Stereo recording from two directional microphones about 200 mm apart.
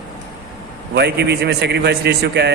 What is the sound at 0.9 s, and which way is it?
A man's voice, 55° right (ahead or behind).